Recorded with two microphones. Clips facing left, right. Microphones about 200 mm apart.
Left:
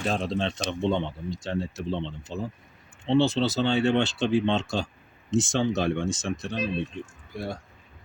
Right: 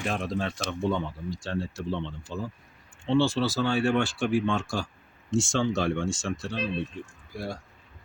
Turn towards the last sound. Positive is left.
turn(degrees=20)  # may be behind; listen again after turning